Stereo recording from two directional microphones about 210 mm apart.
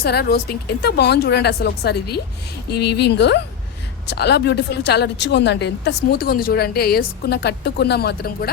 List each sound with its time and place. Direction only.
0.0 s a woman's voice: 50° left (ahead or behind)